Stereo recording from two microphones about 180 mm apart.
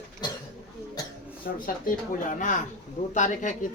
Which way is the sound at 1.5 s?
60° left (ahead or behind).